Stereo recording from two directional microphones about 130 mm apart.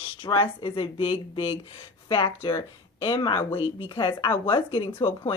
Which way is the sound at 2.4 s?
20° left (ahead or behind).